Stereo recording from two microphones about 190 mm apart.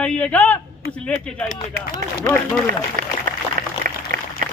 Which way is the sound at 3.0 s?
50° right (ahead or behind).